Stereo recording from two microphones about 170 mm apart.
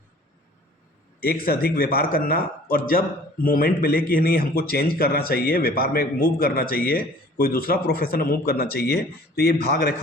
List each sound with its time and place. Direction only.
1.2 s a man's voice: 60° left (ahead or behind)